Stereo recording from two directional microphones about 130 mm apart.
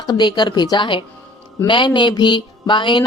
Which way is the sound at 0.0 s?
30° left (ahead or behind).